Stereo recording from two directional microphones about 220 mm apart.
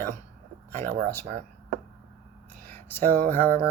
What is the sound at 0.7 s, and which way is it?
Speech, 10° left (ahead or behind).